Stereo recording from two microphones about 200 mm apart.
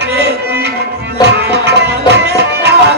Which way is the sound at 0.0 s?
55° right (ahead or behind).